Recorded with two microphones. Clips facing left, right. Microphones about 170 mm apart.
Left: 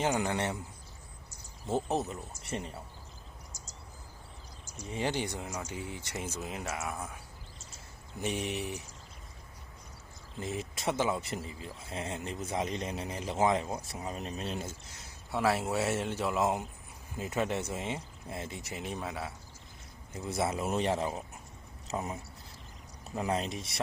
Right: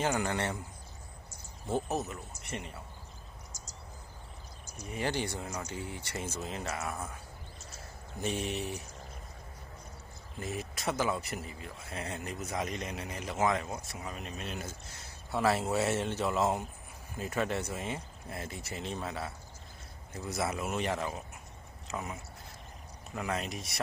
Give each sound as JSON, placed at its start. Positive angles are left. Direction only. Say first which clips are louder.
{"t": 0.0, "sound": "speech", "louder": "left 1 dB", "side_deg": 15}
{"t": 1.6, "sound": "speech", "louder": "left 2 dB", "side_deg": 25}
{"t": 4.9, "sound": "speech", "louder": "left 1 dB", "side_deg": 20}
{"t": 8.2, "sound": "speech", "louder": "even", "side_deg": 15}
{"t": 10.4, "sound": "speech", "louder": "left 1 dB", "side_deg": 25}
{"t": 15.3, "sound": "speech", "louder": "even", "side_deg": 5}
{"t": 20.1, "sound": "speech", "louder": "left 2 dB", "side_deg": 25}